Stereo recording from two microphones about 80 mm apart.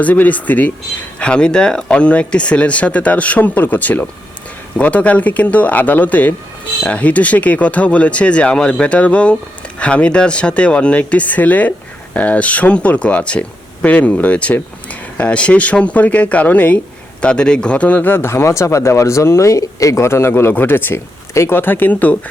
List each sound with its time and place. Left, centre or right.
0.0 s speech: centre